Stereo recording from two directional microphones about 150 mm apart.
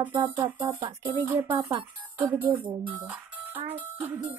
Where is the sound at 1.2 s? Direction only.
10° right (ahead or behind).